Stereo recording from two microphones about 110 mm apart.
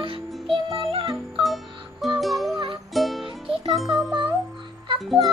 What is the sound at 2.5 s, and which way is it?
Music, 55° right (ahead or behind).